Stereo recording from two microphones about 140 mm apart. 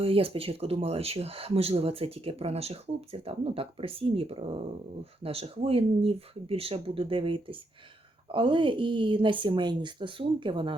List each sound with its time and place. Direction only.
0.0 s speech: 40° right (ahead or behind)